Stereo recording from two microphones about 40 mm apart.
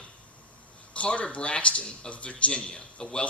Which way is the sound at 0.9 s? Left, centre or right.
Left.